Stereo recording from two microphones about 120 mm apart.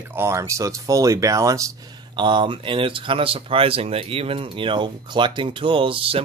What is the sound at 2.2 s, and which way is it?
Speech, 40° right (ahead or behind).